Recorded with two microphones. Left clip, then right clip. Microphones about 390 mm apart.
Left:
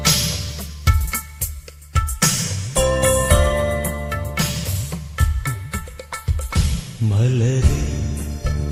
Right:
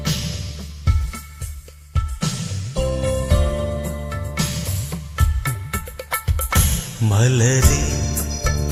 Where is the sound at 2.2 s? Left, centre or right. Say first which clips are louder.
Left 7 dB; left; by 6.6 s centre.